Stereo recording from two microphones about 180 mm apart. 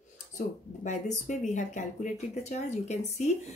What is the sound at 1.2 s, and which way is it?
Speech, 40° left (ahead or behind).